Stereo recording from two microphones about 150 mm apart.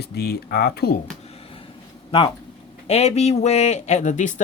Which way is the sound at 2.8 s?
45° left (ahead or behind).